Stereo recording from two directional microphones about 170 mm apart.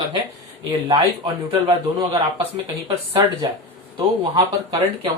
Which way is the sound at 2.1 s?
35° right (ahead or behind).